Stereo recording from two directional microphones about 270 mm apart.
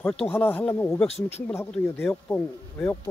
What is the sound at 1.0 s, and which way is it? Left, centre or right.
Speech, left.